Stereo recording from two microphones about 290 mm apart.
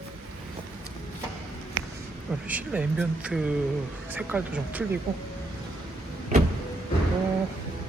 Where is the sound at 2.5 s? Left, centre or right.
Centre.